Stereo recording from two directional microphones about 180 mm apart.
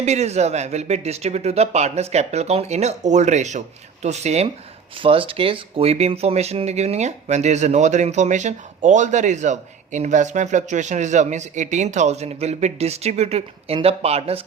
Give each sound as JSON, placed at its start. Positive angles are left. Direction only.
{"t": 0.0, "sound": "speech", "side_deg": -40}